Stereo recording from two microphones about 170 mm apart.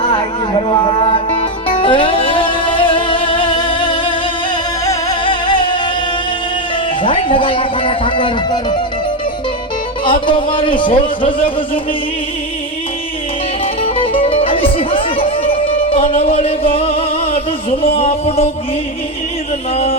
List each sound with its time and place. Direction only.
0.0 s music: 30° left (ahead or behind)
7.0 s speech: 30° left (ahead or behind)
10.0 s a man's voice: 30° left (ahead or behind)
13.8 s music: 35° left (ahead or behind)
19.7 s speech: 35° left (ahead or behind)